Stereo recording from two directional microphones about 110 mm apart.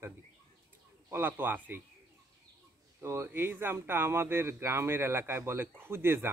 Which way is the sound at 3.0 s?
25° right (ahead or behind).